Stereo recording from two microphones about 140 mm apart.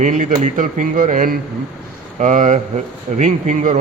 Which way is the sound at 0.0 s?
70° right (ahead or behind).